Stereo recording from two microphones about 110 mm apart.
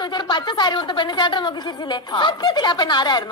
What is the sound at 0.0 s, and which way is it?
A woman's voice, 45° left (ahead or behind).